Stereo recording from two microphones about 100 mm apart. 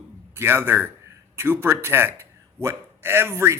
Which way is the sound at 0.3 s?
20° right (ahead or behind).